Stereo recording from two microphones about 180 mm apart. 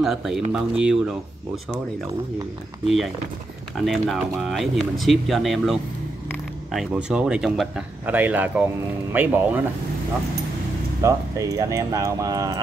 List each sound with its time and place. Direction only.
0.0 s speech: centre (ahead or behind)
3.7 s speech: centre (ahead or behind)
11.0 s speech: 15° right (ahead or behind)